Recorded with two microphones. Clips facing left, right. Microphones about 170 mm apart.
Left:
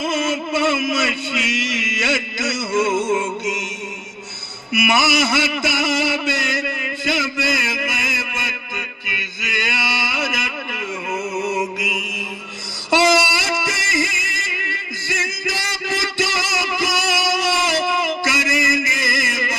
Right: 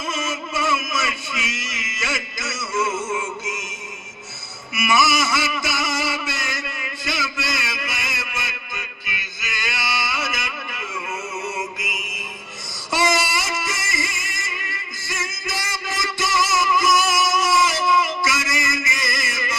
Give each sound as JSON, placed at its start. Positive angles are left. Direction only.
{"t": 0.0, "sound": "a sound", "side_deg": 65}
{"t": 4.7, "sound": "music", "side_deg": 65}
{"t": 11.3, "sound": "mantra", "side_deg": 60}
{"t": 12.9, "sound": "music", "side_deg": 65}